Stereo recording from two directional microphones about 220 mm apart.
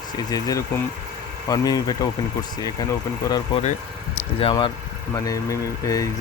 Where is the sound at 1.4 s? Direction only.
15° left (ahead or behind).